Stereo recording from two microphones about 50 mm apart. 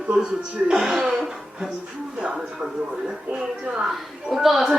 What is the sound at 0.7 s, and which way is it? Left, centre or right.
Speech, centre.